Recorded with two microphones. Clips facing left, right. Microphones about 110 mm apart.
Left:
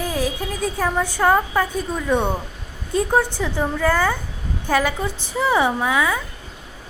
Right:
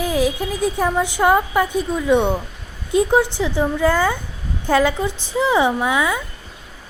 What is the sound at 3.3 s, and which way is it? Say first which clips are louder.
A woman's voice: right 3 dB; 15° right (ahead or behind).